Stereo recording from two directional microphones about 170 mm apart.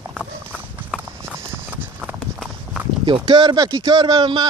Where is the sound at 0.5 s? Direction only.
10° right (ahead or behind).